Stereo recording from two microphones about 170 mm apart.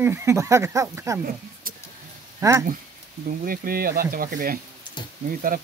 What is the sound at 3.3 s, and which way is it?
Speech, 55° right (ahead or behind).